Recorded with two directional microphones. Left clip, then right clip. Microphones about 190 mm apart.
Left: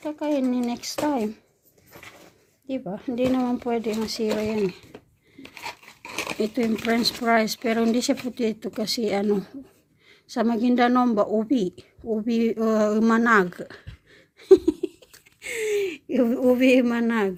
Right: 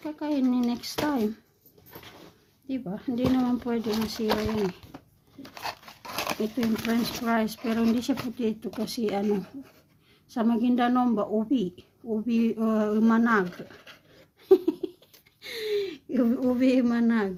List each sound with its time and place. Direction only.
0.0 s speech: 20° left (ahead or behind)
2.6 s speech: 20° left (ahead or behind)
5.6 s a sound: 25° right (ahead or behind)
6.8 s a woman's voice: 45° left (ahead or behind)
14.3 s a sound: 40° left (ahead or behind)
15.4 s speech: 35° left (ahead or behind)